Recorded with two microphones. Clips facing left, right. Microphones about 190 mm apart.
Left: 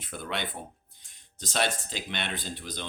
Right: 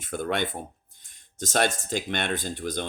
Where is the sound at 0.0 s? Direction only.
50° right (ahead or behind).